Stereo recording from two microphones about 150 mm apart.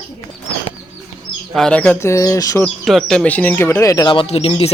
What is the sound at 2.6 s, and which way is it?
Speech, centre (ahead or behind).